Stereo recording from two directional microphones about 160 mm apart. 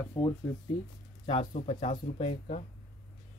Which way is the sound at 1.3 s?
40° left (ahead or behind).